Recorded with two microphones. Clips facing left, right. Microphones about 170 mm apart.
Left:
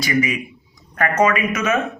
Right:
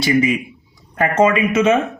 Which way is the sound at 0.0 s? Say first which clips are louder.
Right 4 dB; 30° right (ahead or behind).